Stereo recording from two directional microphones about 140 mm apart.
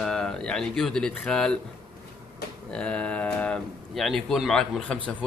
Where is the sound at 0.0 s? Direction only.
5° left (ahead or behind).